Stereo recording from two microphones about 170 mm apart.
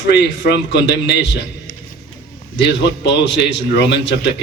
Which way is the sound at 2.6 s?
90° left.